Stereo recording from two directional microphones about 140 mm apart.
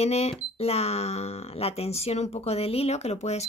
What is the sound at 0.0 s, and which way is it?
Speech, 50° left (ahead or behind).